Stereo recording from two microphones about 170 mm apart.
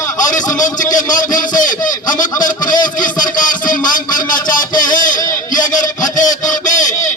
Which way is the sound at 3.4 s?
50° left (ahead or behind).